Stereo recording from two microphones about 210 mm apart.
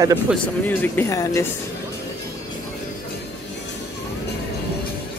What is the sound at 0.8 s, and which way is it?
Speech, 15° left (ahead or behind).